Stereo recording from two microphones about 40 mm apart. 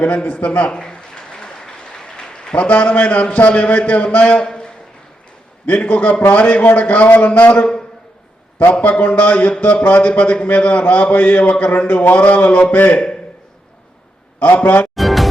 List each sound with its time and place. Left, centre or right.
0.0 s a man's voice: left
0.7 s a sound: centre
2.0 s applause: centre
2.6 s a man's voice: left
4.4 s a sound: left
5.6 s a man's voice: left
7.6 s a sound: left
8.8 s a man's voice: left
14.3 s a man's voice: left
14.9 s music: centre